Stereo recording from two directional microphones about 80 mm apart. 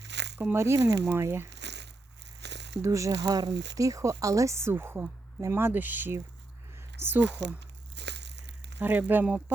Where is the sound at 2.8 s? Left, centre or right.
Right.